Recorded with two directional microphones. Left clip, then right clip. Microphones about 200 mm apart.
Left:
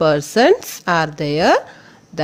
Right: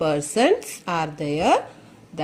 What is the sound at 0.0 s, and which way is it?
A woman's voice, 30° left (ahead or behind).